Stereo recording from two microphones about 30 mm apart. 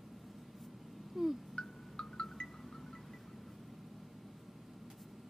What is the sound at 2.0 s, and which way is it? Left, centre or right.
Music, centre.